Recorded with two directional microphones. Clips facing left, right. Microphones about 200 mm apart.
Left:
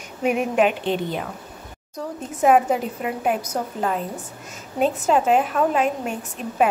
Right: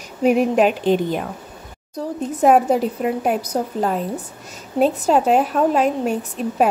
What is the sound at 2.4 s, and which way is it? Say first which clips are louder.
A woman's voice: right 3 dB; 35° right (ahead or behind).